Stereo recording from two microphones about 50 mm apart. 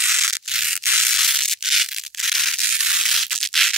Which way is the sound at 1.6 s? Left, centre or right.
Centre.